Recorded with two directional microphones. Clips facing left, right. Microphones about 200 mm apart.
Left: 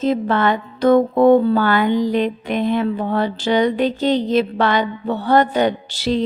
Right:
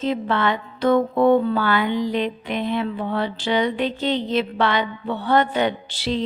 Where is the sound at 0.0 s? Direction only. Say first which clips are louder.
Left 4 dB; 40° left (ahead or behind).